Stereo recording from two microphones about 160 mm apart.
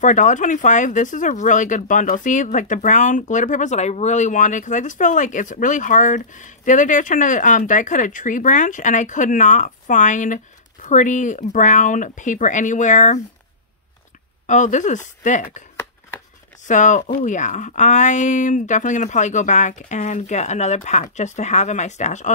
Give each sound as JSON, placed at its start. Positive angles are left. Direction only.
{"t": 0.0, "sound": "speech", "side_deg": 50}
{"t": 14.4, "sound": "speech", "side_deg": 50}
{"t": 16.6, "sound": "speech", "side_deg": 50}